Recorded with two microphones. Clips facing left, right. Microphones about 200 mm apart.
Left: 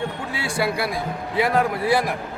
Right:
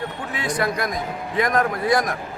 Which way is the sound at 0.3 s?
10° left (ahead or behind).